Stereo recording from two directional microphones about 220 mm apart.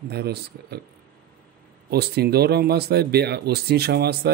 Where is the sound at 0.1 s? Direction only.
45° right (ahead or behind).